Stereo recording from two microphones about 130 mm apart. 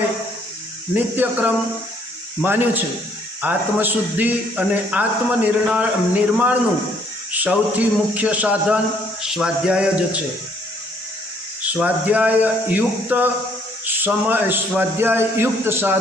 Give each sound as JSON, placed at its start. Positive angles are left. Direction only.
{"t": 1.1, "sound": "a man's voice", "side_deg": -15}
{"t": 11.8, "sound": "a man's voice", "side_deg": -10}